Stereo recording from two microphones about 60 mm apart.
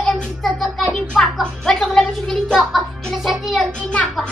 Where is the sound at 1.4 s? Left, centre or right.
Centre.